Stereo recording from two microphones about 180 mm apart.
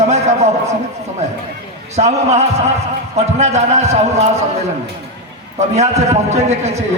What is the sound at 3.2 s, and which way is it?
Speech, 40° right (ahead or behind).